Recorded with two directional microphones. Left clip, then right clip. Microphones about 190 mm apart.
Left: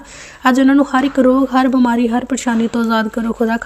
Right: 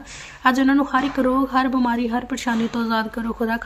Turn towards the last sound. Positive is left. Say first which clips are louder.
# left 6 dB
turn(degrees=30)  # may be behind; listen again after turning